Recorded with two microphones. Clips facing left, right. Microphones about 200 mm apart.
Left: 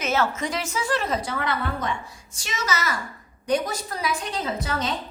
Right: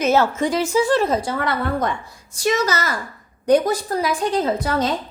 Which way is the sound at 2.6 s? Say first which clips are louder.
Right 4 dB; 35° right (ahead or behind).